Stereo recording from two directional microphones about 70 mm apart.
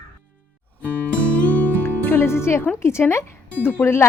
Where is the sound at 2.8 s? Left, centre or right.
Left.